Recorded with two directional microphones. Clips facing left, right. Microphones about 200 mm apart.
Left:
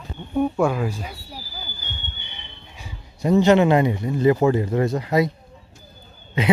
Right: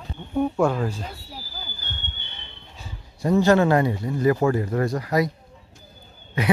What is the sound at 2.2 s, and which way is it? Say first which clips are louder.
Speech: left 1 dB; 15° left (ahead or behind).